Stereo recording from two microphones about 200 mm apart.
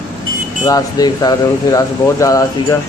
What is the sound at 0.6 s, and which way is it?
Speech, 20° left (ahead or behind).